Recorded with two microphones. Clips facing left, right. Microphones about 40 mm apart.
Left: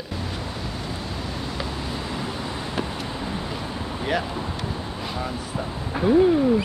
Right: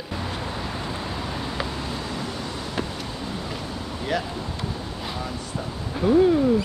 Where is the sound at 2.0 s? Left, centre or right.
Centre.